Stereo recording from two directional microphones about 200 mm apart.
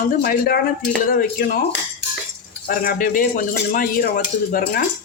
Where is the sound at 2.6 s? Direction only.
45° left (ahead or behind).